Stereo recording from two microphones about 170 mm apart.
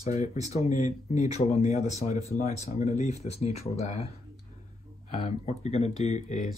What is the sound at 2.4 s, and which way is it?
Speech, 40° left (ahead or behind).